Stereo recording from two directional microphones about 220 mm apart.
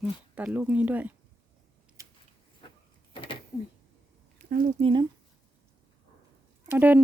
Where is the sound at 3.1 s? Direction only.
25° left (ahead or behind).